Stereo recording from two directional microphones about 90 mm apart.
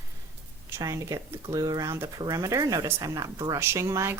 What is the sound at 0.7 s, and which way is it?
Speech, 40° right (ahead or behind).